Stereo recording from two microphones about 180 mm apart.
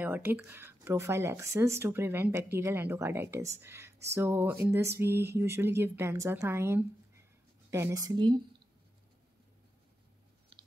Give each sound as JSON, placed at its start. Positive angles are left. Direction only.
{"t": 0.0, "sound": "a woman's voice", "side_deg": -10}